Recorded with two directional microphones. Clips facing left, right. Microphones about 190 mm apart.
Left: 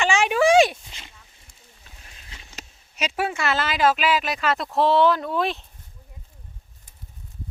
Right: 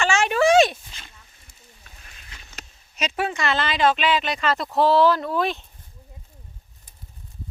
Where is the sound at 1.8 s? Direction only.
25° left (ahead or behind); by 5.6 s centre (ahead or behind).